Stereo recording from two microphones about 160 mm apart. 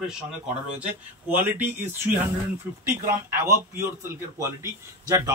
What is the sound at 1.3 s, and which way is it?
A man's voice, 10° right (ahead or behind).